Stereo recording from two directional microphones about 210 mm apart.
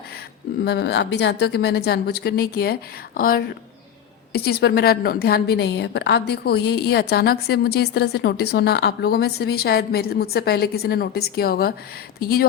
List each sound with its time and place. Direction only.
0.6 s a woman's voice: 50° left (ahead or behind)